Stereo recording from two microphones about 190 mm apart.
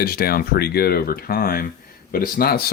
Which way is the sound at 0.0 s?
55° left (ahead or behind).